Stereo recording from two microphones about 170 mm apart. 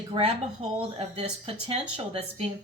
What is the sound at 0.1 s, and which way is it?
Speech, 30° right (ahead or behind).